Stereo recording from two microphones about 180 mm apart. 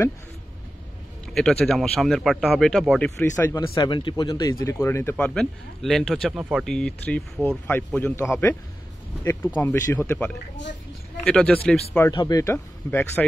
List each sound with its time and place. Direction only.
1.3 s speech: 5° left (ahead or behind)
3.2 s speech: 15° left (ahead or behind)
3.6 s speech: 25° left (ahead or behind); by 11.8 s 5° left (ahead or behind)
12.1 s speech: 20° left (ahead or behind)